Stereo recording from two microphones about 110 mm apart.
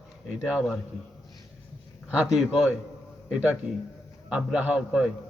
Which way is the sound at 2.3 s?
5° right (ahead or behind).